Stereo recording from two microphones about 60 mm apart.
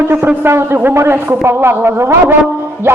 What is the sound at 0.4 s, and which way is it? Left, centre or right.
A man's voice, right.